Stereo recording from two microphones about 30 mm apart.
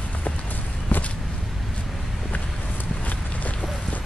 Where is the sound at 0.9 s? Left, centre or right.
Left.